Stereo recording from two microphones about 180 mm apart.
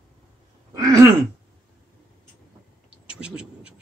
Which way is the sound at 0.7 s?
20° right (ahead or behind).